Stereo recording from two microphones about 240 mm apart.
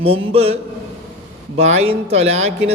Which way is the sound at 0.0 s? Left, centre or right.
Right.